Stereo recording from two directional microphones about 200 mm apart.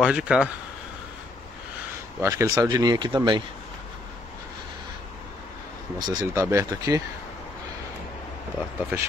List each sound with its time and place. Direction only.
0.0 s speech: 5° right (ahead or behind)
2.2 s speech: 15° right (ahead or behind)
5.9 s speech: 15° right (ahead or behind)
8.9 s speech: 10° right (ahead or behind)